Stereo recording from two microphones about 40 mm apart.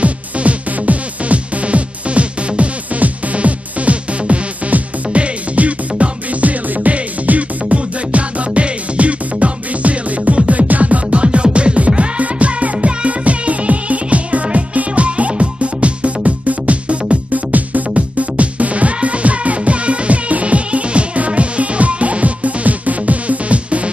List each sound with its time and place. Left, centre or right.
0.0 s music: right